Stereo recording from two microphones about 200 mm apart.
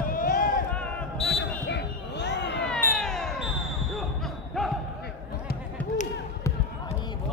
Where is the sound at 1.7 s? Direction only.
60° left (ahead or behind).